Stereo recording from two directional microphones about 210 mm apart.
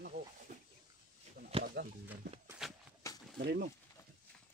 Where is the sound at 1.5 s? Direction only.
30° right (ahead or behind).